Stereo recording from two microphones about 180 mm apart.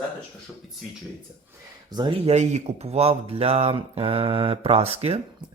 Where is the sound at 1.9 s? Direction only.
25° right (ahead or behind).